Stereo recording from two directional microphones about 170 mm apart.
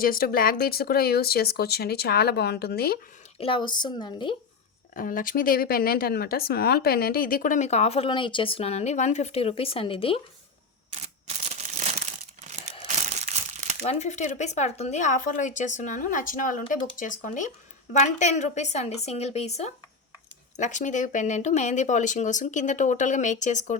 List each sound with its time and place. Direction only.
0.0 s speech: 60° left (ahead or behind)
3.3 s a woman's voice: 30° left (ahead or behind)
4.9 s a woman's voice: 55° left (ahead or behind); by 10.2 s 30° left (ahead or behind)
11.0 s a sound: 40° right (ahead or behind)
13.1 s crumpling: 40° right (ahead or behind)
13.8 s a woman's voice: 40° left (ahead or behind)